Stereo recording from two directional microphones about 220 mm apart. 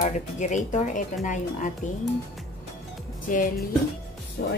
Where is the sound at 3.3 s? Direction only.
40° left (ahead or behind).